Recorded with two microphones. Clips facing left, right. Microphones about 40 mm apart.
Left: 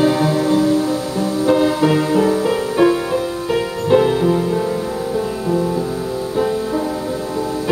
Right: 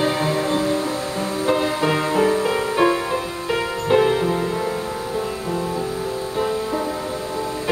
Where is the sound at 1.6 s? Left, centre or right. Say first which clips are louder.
Left 5 dB; right; by 4.6 s centre.